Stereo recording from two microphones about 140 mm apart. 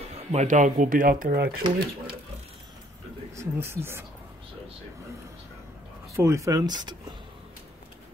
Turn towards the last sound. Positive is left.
turn(degrees=-30)  # may be behind; listen again after turning